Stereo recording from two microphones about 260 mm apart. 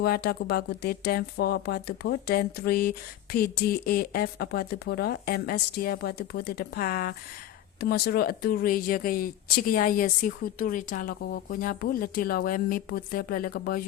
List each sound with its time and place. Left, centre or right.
0.0 s speech: left